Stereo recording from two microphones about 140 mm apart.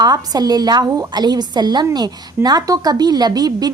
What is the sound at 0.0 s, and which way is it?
A woman's voice, 30° right (ahead or behind).